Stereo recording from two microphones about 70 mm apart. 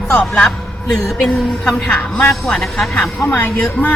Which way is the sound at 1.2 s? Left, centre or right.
Centre.